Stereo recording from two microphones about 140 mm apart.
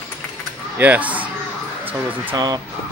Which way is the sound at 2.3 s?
30° right (ahead or behind).